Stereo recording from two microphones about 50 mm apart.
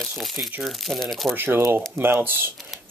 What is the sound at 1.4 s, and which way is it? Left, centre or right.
Speech, right.